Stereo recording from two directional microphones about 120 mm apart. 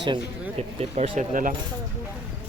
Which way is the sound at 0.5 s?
55° right (ahead or behind).